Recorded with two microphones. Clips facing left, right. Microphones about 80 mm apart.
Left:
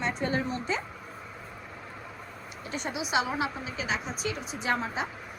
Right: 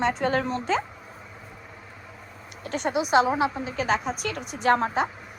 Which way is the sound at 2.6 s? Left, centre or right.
Right.